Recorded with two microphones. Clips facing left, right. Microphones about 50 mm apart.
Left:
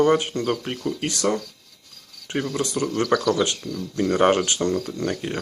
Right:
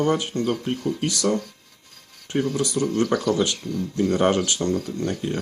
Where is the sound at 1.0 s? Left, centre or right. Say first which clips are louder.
Even; left.